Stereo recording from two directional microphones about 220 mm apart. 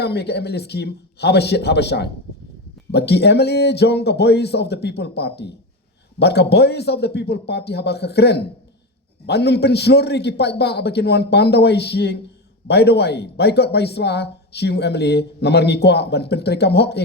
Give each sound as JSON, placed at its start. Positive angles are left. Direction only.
{"t": 0.0, "sound": "speech", "side_deg": 50}